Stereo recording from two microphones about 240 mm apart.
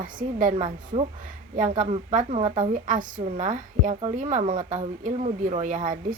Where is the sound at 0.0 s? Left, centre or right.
Right.